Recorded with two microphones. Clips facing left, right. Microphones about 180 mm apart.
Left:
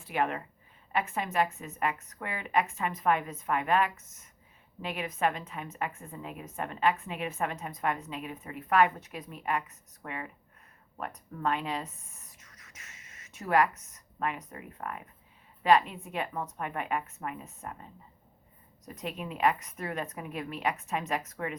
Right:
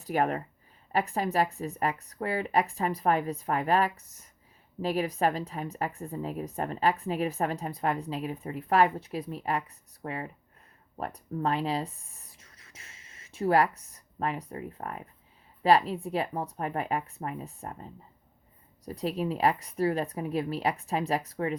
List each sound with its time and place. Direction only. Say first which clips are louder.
0.0 s a woman's voice: right 3 dB; 40° right (ahead or behind)
18.9 s a woman's voice: right 7 dB; 35° right (ahead or behind)